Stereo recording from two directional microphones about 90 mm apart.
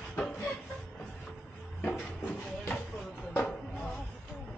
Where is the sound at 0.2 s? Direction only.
15° left (ahead or behind).